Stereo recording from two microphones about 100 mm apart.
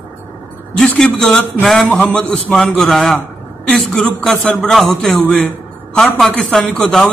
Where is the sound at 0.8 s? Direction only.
5° left (ahead or behind).